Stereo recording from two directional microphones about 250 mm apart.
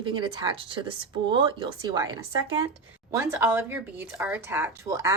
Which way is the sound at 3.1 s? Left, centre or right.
Centre.